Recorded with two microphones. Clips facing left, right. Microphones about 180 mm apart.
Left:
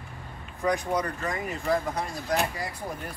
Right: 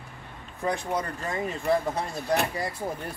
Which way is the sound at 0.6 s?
30° right (ahead or behind).